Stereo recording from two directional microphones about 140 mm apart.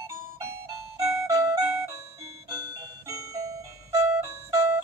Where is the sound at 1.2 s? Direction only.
25° right (ahead or behind).